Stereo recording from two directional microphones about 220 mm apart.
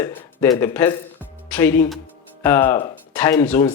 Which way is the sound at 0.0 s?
10° left (ahead or behind).